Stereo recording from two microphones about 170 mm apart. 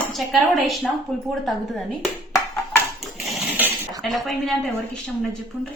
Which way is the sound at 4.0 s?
Centre (ahead or behind).